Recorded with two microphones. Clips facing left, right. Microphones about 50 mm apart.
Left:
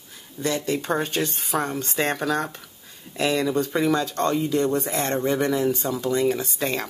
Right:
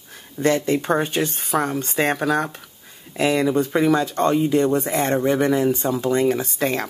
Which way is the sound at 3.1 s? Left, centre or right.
Centre.